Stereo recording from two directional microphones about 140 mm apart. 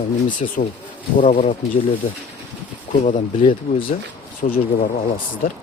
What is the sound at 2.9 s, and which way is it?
Speech, 65° left (ahead or behind).